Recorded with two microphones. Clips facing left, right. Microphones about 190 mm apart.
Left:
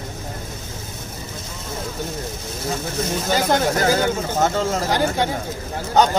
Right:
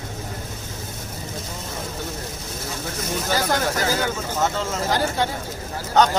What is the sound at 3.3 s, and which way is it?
Speech, 20° left (ahead or behind).